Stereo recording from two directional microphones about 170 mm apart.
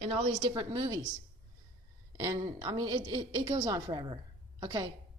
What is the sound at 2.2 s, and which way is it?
A woman's voice, 20° right (ahead or behind).